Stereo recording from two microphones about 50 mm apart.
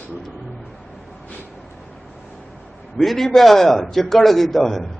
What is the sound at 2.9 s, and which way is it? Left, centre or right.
A man's voice, centre.